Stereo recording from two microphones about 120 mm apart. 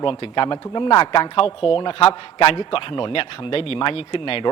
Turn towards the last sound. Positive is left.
turn(degrees=50)  # may be behind; listen again after turning